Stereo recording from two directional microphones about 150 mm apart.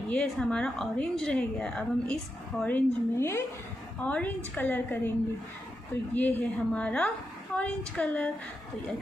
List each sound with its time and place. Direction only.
0.1 s a woman's voice: 5° left (ahead or behind)
6.1 s a woman's voice: 10° left (ahead or behind)